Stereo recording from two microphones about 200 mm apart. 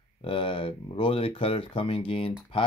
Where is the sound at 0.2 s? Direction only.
25° left (ahead or behind).